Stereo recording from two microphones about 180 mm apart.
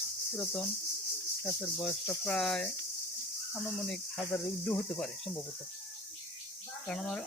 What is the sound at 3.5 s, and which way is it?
Cricket, 5° left (ahead or behind).